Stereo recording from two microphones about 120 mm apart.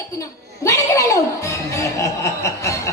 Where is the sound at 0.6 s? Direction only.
25° left (ahead or behind).